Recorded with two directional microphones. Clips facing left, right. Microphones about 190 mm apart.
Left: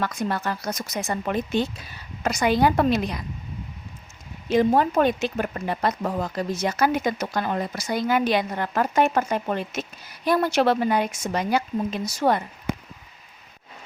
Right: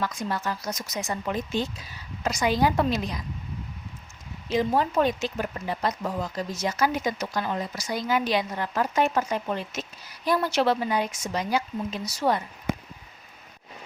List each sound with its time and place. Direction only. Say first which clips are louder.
0.0 s speech: left 3 dB; 60° left (ahead or behind)
4.4 s speech: left 5 dB; 55° left (ahead or behind)